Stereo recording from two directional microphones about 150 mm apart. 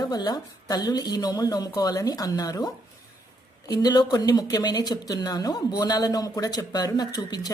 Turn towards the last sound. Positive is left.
turn(degrees=25)  # may be behind; listen again after turning